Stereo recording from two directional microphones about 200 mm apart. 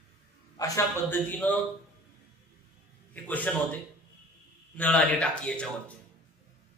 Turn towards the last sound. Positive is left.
turn(degrees=5)  # may be behind; listen again after turning